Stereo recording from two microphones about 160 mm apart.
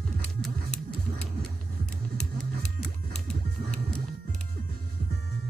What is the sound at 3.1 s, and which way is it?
Music, 5° left (ahead or behind).